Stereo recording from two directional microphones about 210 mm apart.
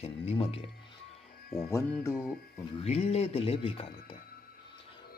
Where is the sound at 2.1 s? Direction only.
5° right (ahead or behind).